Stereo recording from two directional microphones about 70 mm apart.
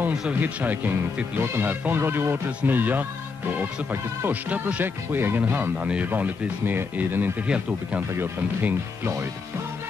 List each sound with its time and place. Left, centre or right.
0.1 s speech: centre
0.4 s speech: right
5.8 s speech: centre
6.0 s speech: right
7.4 s speech: centre
8.6 s speech: right